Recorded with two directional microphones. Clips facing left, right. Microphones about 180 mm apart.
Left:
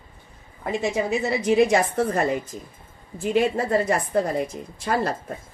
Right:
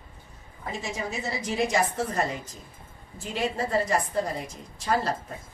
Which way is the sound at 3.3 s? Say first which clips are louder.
Left 6 dB; 55° left (ahead or behind).